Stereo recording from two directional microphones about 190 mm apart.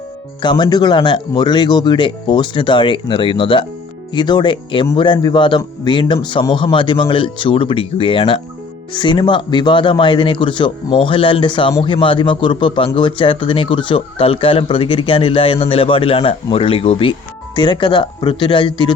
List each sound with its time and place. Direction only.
0.4 s a man's voice: 25° left (ahead or behind)